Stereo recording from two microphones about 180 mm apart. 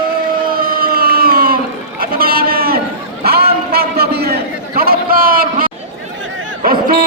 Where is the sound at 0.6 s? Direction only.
55° right (ahead or behind).